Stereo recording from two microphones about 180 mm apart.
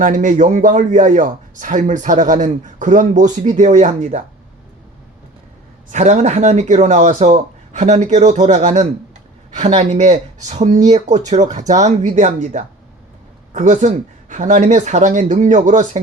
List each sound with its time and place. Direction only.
0.0 s a man's voice: 45° right (ahead or behind)
5.9 s a man's voice: 40° right (ahead or behind)